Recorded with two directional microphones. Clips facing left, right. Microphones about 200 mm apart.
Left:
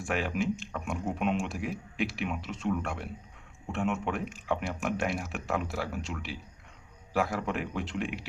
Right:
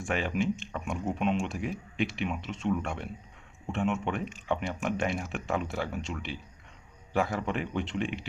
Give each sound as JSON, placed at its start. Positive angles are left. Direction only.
{"t": 0.0, "sound": "speech", "side_deg": 5}